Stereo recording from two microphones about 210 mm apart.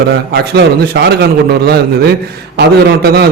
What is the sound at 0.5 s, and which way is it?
A man's voice, 50° right (ahead or behind).